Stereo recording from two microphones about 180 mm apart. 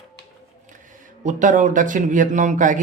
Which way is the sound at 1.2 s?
45° right (ahead or behind).